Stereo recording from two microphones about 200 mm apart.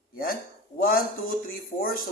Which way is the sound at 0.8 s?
45° left (ahead or behind).